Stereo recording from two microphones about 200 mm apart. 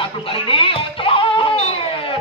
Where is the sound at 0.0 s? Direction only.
25° left (ahead or behind).